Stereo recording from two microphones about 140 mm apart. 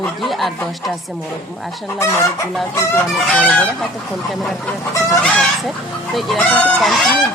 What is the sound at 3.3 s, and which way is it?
Speech, 10° left (ahead or behind).